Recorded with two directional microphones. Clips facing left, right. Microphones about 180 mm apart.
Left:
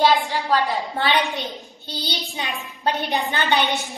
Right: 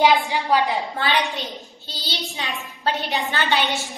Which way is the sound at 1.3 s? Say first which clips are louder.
Left 1 dB; 60° left (ahead or behind).